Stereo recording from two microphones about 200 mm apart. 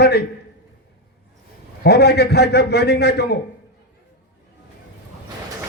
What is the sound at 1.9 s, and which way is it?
A man's voice, 55° left (ahead or behind).